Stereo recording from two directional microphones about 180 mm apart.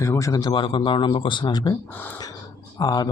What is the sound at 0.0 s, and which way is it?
Speech, 15° left (ahead or behind).